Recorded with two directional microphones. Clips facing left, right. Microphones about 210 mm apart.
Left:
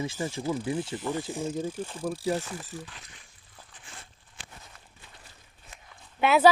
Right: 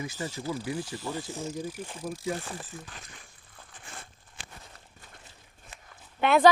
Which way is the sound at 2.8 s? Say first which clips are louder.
Even; 45° right (ahead or behind).